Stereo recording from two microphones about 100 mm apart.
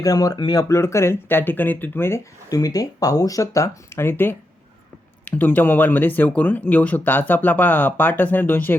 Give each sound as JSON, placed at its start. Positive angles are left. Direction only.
{"t": 0.0, "sound": "speech", "side_deg": 35}
{"t": 0.7, "sound": "speech", "side_deg": 30}
{"t": 2.5, "sound": "speech", "side_deg": 40}